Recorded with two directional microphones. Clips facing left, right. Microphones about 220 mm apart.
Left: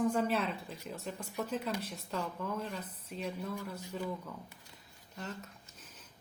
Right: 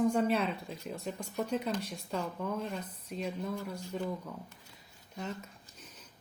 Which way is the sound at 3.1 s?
40° right (ahead or behind).